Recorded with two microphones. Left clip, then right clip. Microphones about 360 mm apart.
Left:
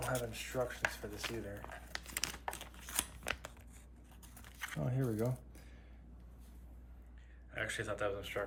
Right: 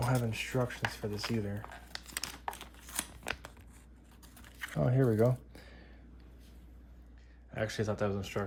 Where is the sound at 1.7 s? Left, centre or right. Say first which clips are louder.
Right 1 dB; centre.